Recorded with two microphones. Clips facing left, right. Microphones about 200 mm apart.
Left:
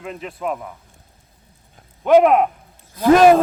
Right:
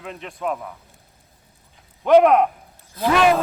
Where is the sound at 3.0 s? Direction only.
45° left (ahead or behind).